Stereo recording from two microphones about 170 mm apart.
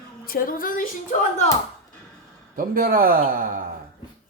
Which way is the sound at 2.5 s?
55° right (ahead or behind).